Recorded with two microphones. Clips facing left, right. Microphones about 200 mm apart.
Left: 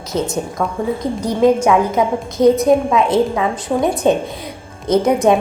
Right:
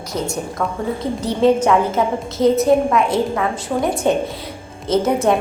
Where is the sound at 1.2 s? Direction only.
10° left (ahead or behind).